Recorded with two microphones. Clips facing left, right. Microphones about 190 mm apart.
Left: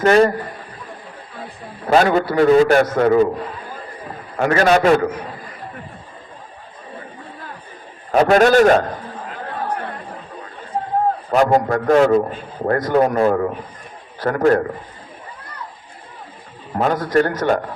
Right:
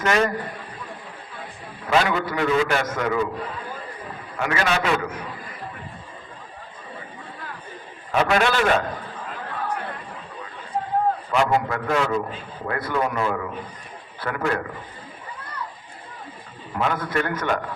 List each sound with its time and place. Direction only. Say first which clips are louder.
0.0 s a man's voice: left 8 dB; 35° left (ahead or behind)
1.9 s a man's voice: left 7 dB; 40° left (ahead or behind)
4.4 s a man's voice: left 9 dB; 40° left (ahead or behind)
8.1 s a man's voice: left 8 dB; 40° left (ahead or behind)
11.3 s a man's voice: left 10 dB; 40° left (ahead or behind)
16.7 s a man's voice: left 7 dB; 40° left (ahead or behind)